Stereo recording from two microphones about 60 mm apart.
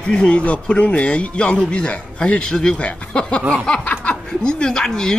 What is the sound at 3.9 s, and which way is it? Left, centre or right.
Snicker, centre.